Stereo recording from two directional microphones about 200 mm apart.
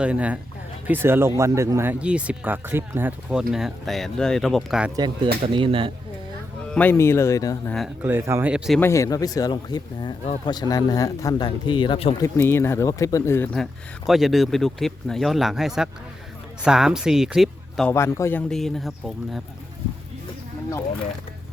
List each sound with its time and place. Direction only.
0.0 s speech: 5° right (ahead or behind)
4.9 s speech: 20° right (ahead or behind)
6.7 s speech: 10° left (ahead or behind)
8.0 s speech: 10° right (ahead or behind)
8.8 s speech: 15° left (ahead or behind)
12.2 s speech: 10° left (ahead or behind)
17.9 s speech: 15° left (ahead or behind)